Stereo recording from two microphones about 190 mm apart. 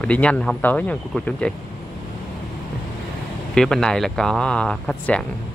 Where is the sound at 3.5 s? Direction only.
5° left (ahead or behind).